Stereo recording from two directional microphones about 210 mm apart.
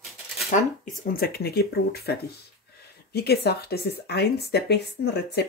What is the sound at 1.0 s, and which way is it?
A woman's voice, 45° left (ahead or behind).